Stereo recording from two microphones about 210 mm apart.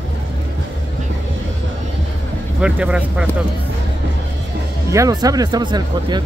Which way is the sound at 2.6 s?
5° right (ahead or behind).